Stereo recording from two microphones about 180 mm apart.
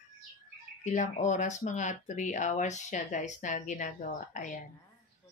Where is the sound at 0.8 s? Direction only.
45° left (ahead or behind).